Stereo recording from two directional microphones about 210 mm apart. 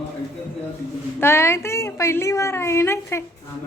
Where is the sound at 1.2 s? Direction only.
10° left (ahead or behind).